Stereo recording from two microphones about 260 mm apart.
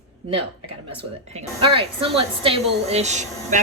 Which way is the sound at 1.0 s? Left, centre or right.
Right.